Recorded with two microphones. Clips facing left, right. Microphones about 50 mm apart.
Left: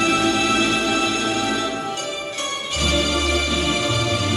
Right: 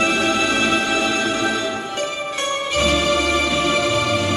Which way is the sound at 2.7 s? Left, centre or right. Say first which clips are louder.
Right 4 dB; right.